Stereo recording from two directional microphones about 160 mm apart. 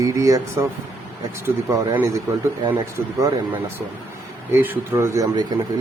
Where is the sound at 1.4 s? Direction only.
15° right (ahead or behind).